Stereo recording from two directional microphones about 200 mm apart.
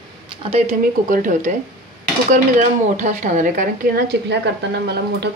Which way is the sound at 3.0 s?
40° right (ahead or behind).